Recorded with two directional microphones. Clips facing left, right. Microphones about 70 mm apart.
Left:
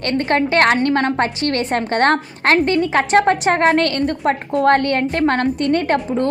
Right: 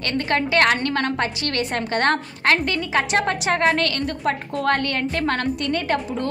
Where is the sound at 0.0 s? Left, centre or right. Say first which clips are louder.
Left 5 dB; left.